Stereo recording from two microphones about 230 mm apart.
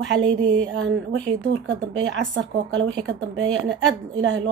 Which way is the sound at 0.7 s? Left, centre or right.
Right.